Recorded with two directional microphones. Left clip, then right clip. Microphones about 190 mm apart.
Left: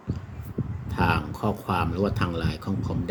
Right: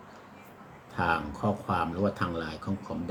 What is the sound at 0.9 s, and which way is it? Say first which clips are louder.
Speech: left 3 dB; 45° left (ahead or behind).